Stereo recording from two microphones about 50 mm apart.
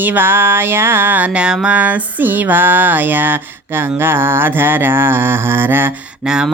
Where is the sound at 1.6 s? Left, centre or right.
Right.